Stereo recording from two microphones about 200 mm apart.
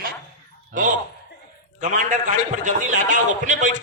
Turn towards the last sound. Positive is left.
turn(degrees=-40)  # may be behind; listen again after turning